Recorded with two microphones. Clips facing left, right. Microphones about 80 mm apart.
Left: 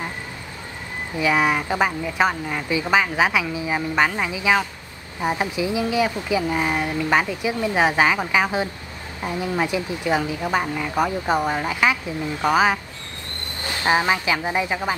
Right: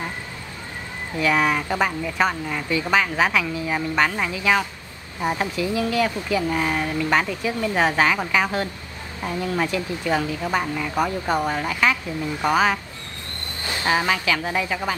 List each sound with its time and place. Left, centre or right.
1.2 s speech: centre
13.8 s speech: left